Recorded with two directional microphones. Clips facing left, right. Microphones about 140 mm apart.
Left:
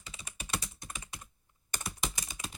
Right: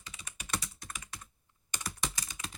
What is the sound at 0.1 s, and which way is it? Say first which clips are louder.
Typing: even; 30° left (ahead or behind).